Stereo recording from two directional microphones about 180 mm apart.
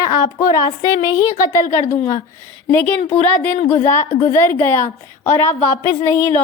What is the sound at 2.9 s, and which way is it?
A woman's voice, 10° left (ahead or behind).